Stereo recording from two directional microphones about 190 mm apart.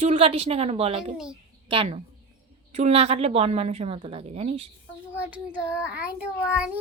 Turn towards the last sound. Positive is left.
turn(degrees=-5)  # may be behind; listen again after turning